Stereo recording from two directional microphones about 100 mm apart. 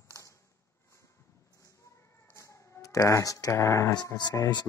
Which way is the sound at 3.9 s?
45° left (ahead or behind).